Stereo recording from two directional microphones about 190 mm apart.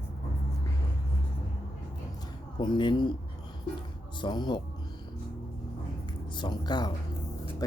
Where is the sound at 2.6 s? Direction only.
25° left (ahead or behind).